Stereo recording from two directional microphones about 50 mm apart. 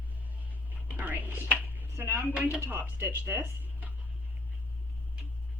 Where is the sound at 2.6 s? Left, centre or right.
Right.